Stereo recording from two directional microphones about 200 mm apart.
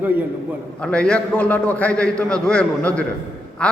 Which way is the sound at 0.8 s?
5° left (ahead or behind).